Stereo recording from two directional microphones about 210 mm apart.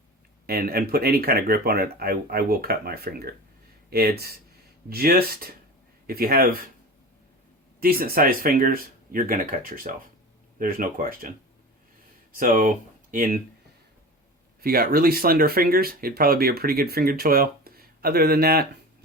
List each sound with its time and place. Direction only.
0.4 s speech: 45° right (ahead or behind)
7.8 s speech: 45° right (ahead or behind)
14.6 s speech: 45° right (ahead or behind)